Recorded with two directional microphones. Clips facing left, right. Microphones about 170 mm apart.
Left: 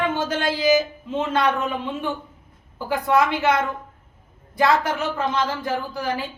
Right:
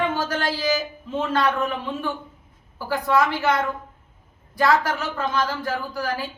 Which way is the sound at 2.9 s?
20° left (ahead or behind).